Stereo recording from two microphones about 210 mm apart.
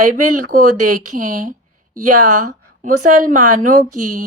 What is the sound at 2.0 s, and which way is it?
Speech, 90° right.